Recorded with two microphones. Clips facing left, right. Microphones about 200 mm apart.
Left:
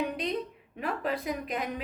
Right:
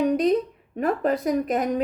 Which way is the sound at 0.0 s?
45° right (ahead or behind).